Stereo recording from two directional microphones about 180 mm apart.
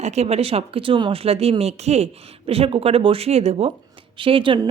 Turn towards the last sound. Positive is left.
turn(degrees=-30)  # may be behind; listen again after turning